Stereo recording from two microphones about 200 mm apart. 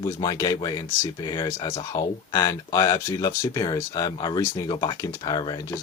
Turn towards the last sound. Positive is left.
turn(degrees=15)  # may be behind; listen again after turning